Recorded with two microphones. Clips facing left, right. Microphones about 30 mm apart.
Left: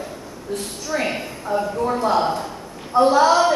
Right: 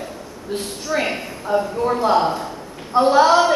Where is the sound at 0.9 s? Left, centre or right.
Right.